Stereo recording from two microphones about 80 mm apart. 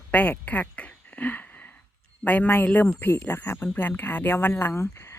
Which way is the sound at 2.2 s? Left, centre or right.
Left.